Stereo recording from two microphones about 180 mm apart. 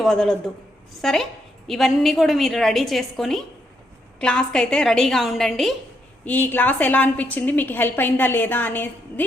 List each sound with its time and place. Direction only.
0.0 s a woman's voice: centre (ahead or behind)